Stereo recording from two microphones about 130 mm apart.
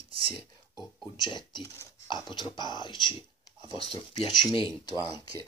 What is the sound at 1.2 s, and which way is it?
Speech, 35° left (ahead or behind).